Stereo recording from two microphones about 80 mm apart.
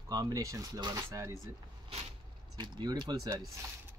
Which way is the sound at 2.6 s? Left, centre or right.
Right.